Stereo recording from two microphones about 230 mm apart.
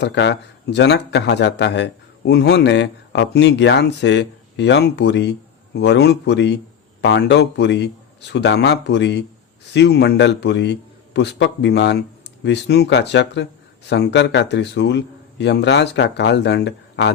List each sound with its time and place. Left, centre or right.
0.0 s speech: left